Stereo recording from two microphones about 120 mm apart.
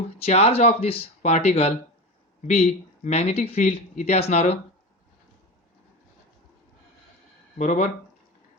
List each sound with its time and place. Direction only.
0.2 s speech: 60° left (ahead or behind)
7.6 s speech: 90° left